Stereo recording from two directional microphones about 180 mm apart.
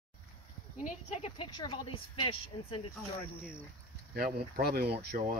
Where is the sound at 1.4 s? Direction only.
25° left (ahead or behind).